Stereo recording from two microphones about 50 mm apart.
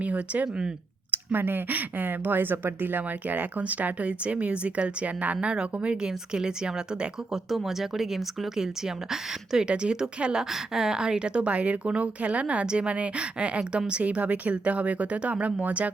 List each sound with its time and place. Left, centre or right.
0.0 s speech: right
1.1 s speech: right; by 6.5 s centre
7.5 s speech: centre
9.5 s a woman's voice: centre